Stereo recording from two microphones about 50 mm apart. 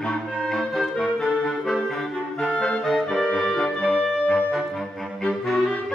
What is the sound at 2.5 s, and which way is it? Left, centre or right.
Clarinet, left.